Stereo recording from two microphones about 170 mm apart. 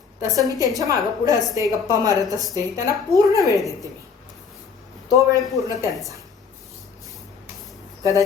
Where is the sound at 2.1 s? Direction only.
20° left (ahead or behind).